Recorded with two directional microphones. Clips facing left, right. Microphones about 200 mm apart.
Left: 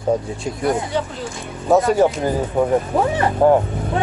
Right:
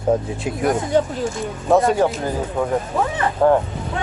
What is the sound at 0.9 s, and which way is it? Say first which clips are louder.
Speech: right 5 dB; 45° right (ahead or behind).